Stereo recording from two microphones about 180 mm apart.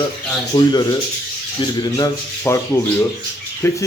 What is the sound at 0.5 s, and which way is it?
Speech, 25° left (ahead or behind).